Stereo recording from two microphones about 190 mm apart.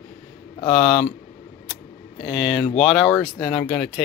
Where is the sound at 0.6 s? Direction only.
25° left (ahead or behind).